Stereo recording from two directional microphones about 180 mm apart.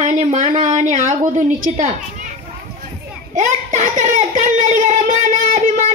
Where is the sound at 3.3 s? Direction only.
45° right (ahead or behind).